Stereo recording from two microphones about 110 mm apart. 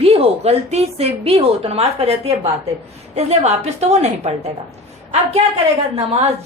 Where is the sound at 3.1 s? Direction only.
80° right.